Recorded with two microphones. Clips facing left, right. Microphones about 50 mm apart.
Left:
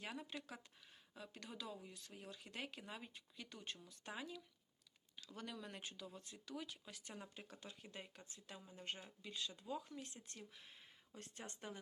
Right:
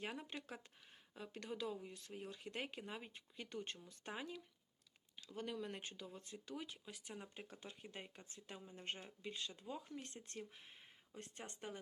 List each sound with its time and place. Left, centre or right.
0.0 s speech: right
6.8 s speech: centre
7.3 s speech: right